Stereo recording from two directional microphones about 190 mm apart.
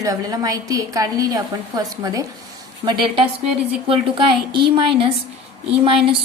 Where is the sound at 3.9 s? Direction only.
30° right (ahead or behind).